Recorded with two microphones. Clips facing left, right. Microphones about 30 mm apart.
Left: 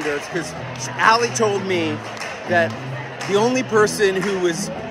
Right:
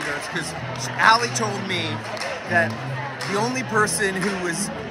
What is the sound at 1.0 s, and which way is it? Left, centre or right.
Speech, right.